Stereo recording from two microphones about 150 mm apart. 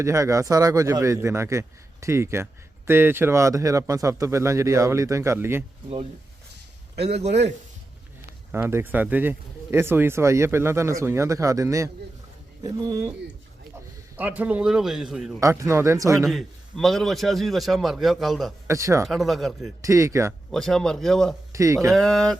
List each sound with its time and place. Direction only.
0.0 s speech: 20° right (ahead or behind)
6.9 s a man's voice: 45° right (ahead or behind)
8.5 s speech: 15° right (ahead or behind)
14.2 s a man's voice: 10° right (ahead or behind)
15.4 s speech: 20° right (ahead or behind)
16.2 s a man's voice: centre (ahead or behind)
18.7 s speech: 20° right (ahead or behind)
19.0 s a man's voice: centre (ahead or behind)
19.8 s speech: 20° right (ahead or behind)
20.5 s a man's voice: 5° left (ahead or behind)
21.5 s speech: 20° right (ahead or behind)
21.8 s a man's voice: centre (ahead or behind)